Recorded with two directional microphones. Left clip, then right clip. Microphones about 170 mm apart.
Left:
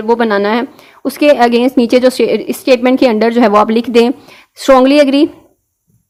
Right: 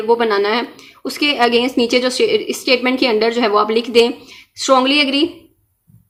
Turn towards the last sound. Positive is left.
turn(degrees=50)  # may be behind; listen again after turning